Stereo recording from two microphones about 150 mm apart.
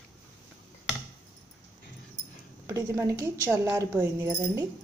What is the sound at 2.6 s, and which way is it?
A woman's voice, 20° right (ahead or behind).